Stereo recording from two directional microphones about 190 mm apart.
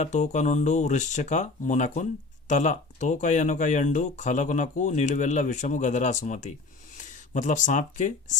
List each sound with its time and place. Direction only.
0.0 s speech: 40° left (ahead or behind)